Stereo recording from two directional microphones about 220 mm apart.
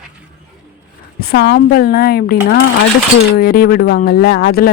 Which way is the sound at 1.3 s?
45° left (ahead or behind).